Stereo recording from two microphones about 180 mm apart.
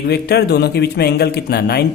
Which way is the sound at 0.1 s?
65° left (ahead or behind).